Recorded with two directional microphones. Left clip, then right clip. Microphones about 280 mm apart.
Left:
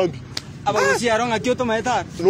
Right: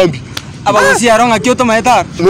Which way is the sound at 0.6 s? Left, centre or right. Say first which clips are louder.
Right 10 dB; right.